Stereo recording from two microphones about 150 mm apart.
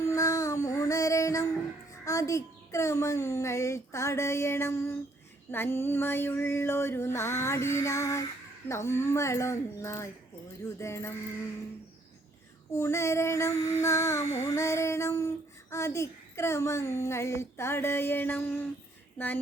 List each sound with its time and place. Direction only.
0.1 s child singing: 20° left (ahead or behind)
2.0 s a child's voice: 20° left (ahead or behind)
12.7 s a child's voice: 20° left (ahead or behind)